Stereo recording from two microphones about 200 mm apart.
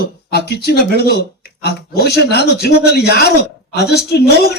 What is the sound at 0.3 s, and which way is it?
A man's voice, 55° left (ahead or behind).